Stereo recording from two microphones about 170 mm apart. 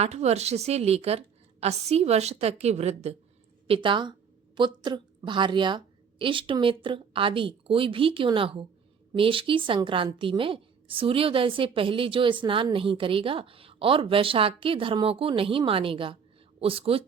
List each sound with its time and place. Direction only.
0.0 s a woman's voice: 40° right (ahead or behind)
3.7 s a woman's voice: 30° right (ahead or behind)